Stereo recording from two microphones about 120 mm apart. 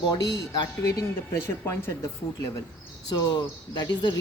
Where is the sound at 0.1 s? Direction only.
35° left (ahead or behind).